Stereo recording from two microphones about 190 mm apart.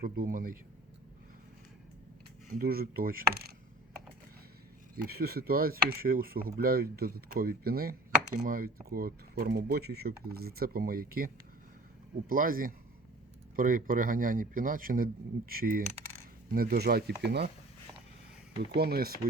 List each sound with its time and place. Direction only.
0.0 s speech: 50° right (ahead or behind)
2.6 s speech: 50° right (ahead or behind)
4.9 s speech: 55° right (ahead or behind)
12.3 s speech: 45° right (ahead or behind)
18.6 s speech: 60° right (ahead or behind)